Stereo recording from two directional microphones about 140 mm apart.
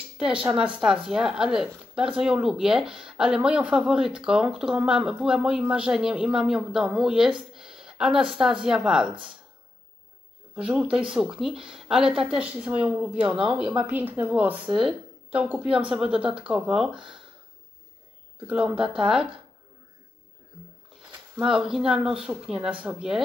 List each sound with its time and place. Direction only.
0.2 s speech: 5° right (ahead or behind)
10.5 s speech: 5° right (ahead or behind)
18.5 s speech: 10° right (ahead or behind)
21.4 s speech: 5° right (ahead or behind)